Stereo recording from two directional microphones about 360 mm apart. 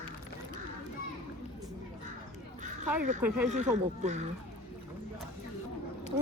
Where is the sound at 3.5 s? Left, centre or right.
Centre.